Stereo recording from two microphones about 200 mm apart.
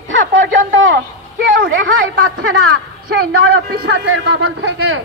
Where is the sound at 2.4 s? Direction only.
90° right.